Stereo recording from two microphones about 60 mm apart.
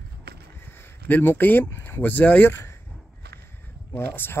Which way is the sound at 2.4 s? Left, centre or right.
Left.